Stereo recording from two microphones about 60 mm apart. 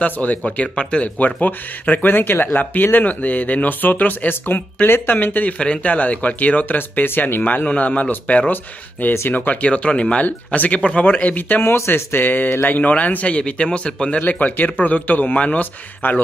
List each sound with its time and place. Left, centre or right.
0.0 s speech: left
5.6 s speech: left
7.6 s speech: left
11.6 s speech: left; by 14.2 s centre
14.2 s speech: left